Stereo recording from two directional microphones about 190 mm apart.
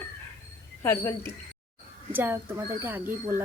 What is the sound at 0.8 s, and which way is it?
Speech, 15° left (ahead or behind).